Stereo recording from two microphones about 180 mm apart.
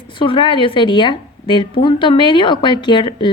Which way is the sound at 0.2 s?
30° left (ahead or behind).